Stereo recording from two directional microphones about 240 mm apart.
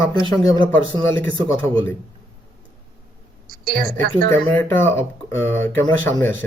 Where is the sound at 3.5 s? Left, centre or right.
Right.